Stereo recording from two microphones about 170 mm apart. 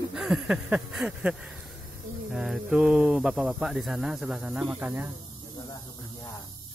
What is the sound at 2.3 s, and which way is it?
Speech, centre (ahead or behind).